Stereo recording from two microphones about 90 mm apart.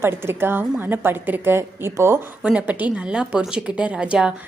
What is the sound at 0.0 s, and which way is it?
Speech, 25° right (ahead or behind).